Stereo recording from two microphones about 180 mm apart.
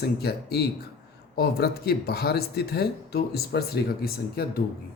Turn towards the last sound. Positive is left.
turn(degrees=60)  # may be behind; listen again after turning